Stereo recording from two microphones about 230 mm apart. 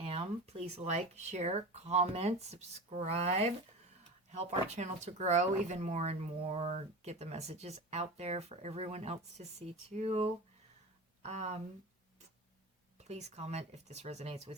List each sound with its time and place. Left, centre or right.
0.0 s speech: right
13.1 s speech: right